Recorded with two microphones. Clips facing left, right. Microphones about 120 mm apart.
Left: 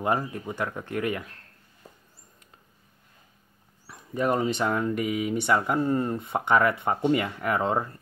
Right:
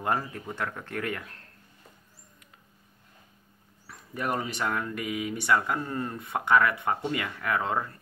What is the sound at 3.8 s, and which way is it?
Speech, 20° left (ahead or behind).